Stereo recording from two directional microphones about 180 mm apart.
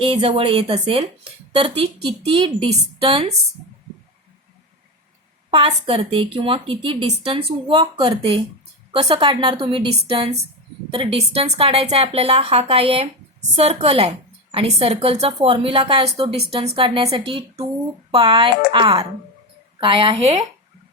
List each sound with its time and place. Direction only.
0.0 s speech: 30° right (ahead or behind)
5.5 s a woman's voice: 30° right (ahead or behind)